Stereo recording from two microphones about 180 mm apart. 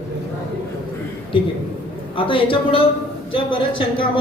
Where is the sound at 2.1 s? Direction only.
30° left (ahead or behind).